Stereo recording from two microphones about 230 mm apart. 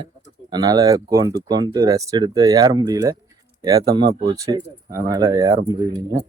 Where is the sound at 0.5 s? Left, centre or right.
Centre.